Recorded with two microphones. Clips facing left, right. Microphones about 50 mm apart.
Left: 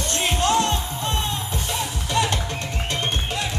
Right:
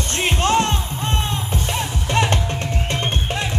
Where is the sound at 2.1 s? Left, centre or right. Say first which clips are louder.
Right 3 dB; right.